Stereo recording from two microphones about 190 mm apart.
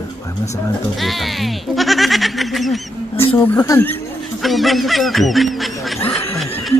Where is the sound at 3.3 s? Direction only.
10° left (ahead or behind).